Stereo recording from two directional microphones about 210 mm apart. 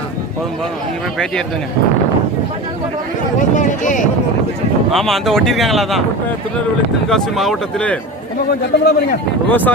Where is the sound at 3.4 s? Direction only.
35° left (ahead or behind).